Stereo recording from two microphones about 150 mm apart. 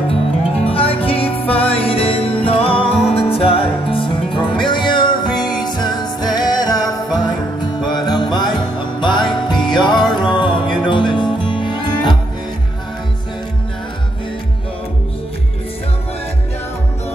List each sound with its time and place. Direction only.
0.6 s music: 40° left (ahead or behind)